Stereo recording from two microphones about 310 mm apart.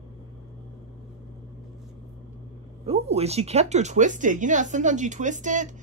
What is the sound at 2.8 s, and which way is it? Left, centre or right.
Speech, centre.